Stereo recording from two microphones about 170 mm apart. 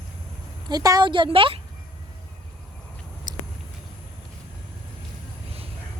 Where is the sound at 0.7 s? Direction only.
20° right (ahead or behind).